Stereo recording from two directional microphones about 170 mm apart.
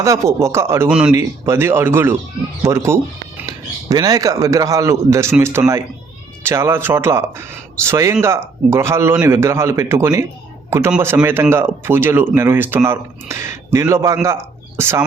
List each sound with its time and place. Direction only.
0.0 s speech: 15° right (ahead or behind)
0.9 s speech: 5° right (ahead or behind)
1.1 s speech: 15° right (ahead or behind)